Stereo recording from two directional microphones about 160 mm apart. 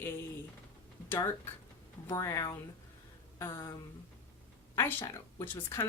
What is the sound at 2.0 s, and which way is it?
Speech, 20° left (ahead or behind).